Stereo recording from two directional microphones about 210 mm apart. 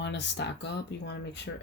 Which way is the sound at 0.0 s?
55° left (ahead or behind).